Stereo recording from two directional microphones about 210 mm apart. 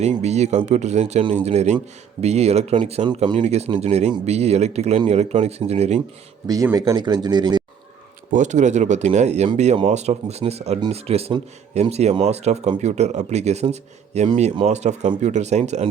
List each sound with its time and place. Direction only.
0.0 s speech: 30° right (ahead or behind)
6.5 s speech: 15° right (ahead or behind)
8.3 s speech: 35° right (ahead or behind)